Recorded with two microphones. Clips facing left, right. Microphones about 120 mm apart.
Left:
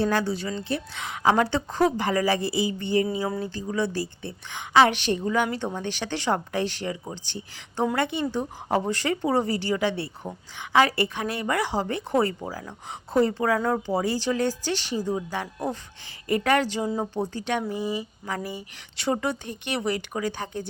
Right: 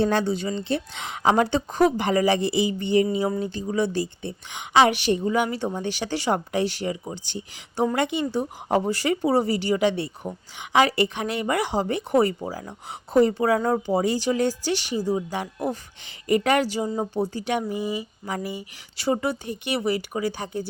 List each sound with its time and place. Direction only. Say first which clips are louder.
0.0 s a woman's voice: right 2 dB; 25° right (ahead or behind)